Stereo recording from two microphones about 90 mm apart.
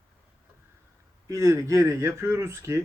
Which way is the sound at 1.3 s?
35° right (ahead or behind).